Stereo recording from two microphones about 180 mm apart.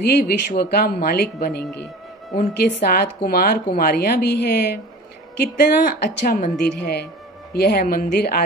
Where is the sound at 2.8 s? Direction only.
60° left (ahead or behind).